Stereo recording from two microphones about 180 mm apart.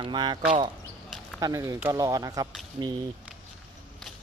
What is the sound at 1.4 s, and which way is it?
Speech, 20° right (ahead or behind).